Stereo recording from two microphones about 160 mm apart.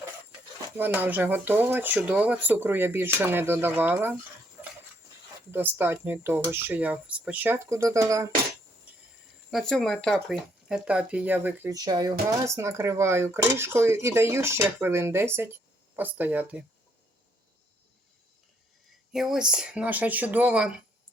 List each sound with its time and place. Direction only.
0.8 s speech: 10° right (ahead or behind)
5.5 s speech: 15° right (ahead or behind)
8.9 s a sound: 10° right (ahead or behind)
9.5 s speech: centre (ahead or behind)
19.1 s speech: centre (ahead or behind)